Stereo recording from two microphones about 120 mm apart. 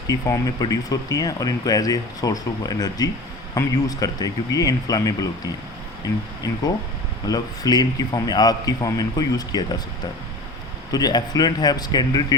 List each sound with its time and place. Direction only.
0.1 s speech: 30° left (ahead or behind)
7.3 s speech: 30° left (ahead or behind)
10.9 s speech: 35° left (ahead or behind)